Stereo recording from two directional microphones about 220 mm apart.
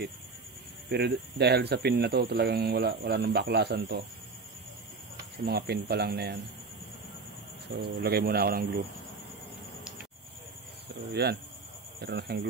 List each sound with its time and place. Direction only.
0.8 s speech: 50° right (ahead or behind)
5.4 s speech: 45° right (ahead or behind)
7.7 s speech: 45° right (ahead or behind)
11.2 s speech: 45° right (ahead or behind)